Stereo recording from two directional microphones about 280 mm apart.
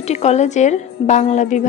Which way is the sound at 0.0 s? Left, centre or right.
Left.